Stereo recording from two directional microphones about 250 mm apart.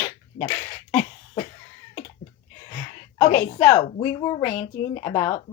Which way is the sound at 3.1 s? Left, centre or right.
Left.